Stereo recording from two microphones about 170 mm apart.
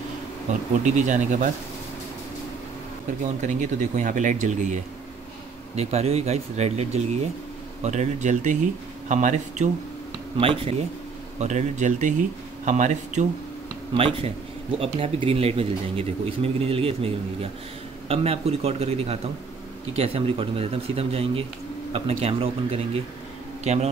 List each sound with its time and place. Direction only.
0.5 s speech: 45° right (ahead or behind)
3.4 s speech: 45° right (ahead or behind)
5.8 s speech: 40° right (ahead or behind)
10.3 s speech: 35° right (ahead or behind)
11.3 s speech: 45° right (ahead or behind)
13.9 s speech: 35° right (ahead or behind)